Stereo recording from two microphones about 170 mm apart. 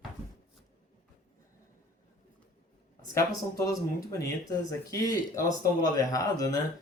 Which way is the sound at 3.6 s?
20° left (ahead or behind).